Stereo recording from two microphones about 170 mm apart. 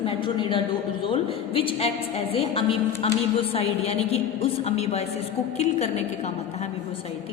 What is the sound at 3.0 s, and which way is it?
A woman's voice, 35° left (ahead or behind).